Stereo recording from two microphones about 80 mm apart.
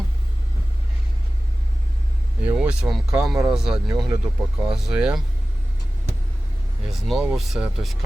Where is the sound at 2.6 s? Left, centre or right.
Centre.